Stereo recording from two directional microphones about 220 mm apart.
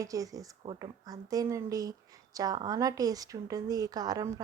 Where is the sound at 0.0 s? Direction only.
15° right (ahead or behind).